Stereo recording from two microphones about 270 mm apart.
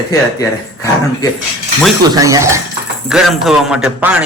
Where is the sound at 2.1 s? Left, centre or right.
Centre.